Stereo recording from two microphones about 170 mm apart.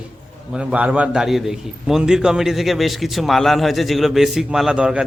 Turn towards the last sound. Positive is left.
turn(degrees=-5)  # may be behind; listen again after turning